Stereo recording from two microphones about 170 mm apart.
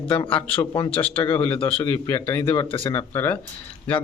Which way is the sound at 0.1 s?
30° left (ahead or behind).